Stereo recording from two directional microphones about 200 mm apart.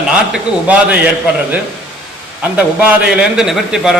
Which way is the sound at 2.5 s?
5° right (ahead or behind).